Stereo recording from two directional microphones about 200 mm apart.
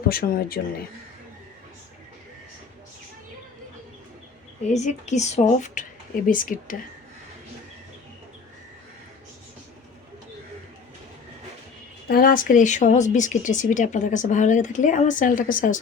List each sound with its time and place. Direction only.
0.1 s speech: 50° left (ahead or behind)
4.7 s speech: 35° left (ahead or behind)
12.0 s speech: 50° left (ahead or behind)